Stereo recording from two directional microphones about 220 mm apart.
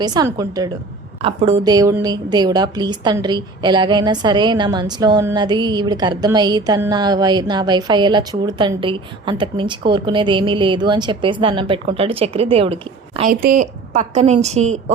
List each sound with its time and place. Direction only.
0.0 s a woman's voice: 20° right (ahead or behind)
1.2 s a woman's voice: 25° right (ahead or behind)
1.6 s a woman's voice: 15° right (ahead or behind)